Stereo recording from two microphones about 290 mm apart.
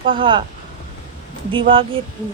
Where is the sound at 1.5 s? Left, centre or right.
Centre.